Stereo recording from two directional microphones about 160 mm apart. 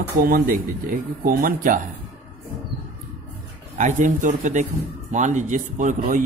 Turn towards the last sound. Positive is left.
turn(degrees=-55)  # may be behind; listen again after turning